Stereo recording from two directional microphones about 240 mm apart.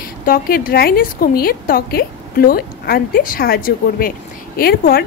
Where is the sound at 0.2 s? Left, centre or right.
Left.